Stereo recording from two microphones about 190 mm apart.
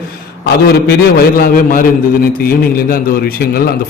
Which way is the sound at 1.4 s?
45° left (ahead or behind).